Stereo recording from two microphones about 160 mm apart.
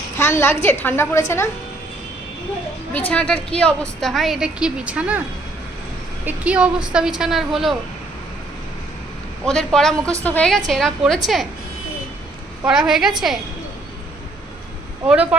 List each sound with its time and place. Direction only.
0.2 s a woman's voice: 15° left (ahead or behind)
2.9 s a woman's voice: 10° left (ahead or behind); by 5.2 s 10° right (ahead or behind)
6.2 s a woman's voice: 10° right (ahead or behind)
9.4 s a woman's voice: 5° left (ahead or behind)
12.6 s a woman's voice: 5° right (ahead or behind)
15.0 s speech: 5° right (ahead or behind)